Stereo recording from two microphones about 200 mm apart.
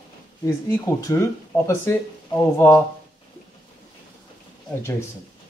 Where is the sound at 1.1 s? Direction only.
15° left (ahead or behind).